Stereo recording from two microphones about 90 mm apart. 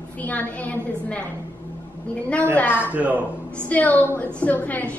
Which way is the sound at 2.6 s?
25° left (ahead or behind).